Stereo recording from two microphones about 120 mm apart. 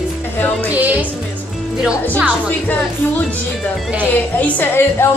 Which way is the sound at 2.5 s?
15° left (ahead or behind).